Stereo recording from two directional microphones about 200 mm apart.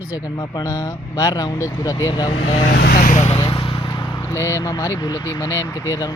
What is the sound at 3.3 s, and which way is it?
Speech, 25° left (ahead or behind).